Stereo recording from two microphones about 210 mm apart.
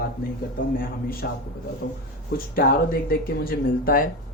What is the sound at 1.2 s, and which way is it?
Speech, 50° left (ahead or behind).